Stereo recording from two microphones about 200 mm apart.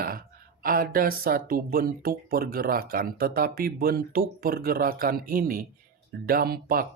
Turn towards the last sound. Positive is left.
turn(degrees=-45)  # may be behind; listen again after turning